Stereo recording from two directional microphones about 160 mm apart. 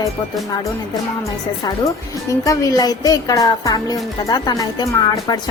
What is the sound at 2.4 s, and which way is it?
A child's voice, 20° left (ahead or behind).